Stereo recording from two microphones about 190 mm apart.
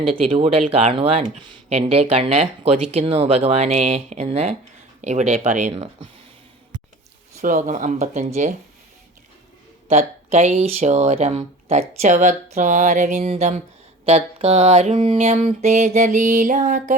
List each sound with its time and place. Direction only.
0.0 s speech: 30° right (ahead or behind)
7.3 s speech: 40° right (ahead or behind)
9.9 s speech: 35° right (ahead or behind)